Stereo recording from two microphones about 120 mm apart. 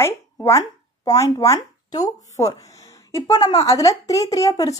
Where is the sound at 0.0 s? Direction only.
25° left (ahead or behind).